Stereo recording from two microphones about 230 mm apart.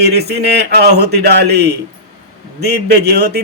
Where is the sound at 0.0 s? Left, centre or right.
Right.